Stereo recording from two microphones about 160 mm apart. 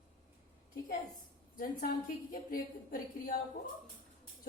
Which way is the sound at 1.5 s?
60° left (ahead or behind).